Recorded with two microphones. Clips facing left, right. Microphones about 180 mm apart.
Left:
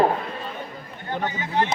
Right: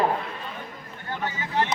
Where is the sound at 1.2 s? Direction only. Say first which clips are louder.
Left 2 dB; 20° left (ahead or behind).